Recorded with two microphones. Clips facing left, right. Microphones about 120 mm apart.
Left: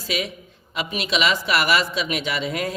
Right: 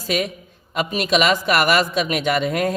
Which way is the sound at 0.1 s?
50° right (ahead or behind).